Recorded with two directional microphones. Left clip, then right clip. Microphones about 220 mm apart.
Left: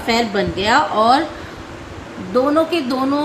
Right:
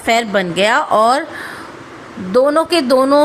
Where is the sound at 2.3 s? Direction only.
50° right (ahead or behind).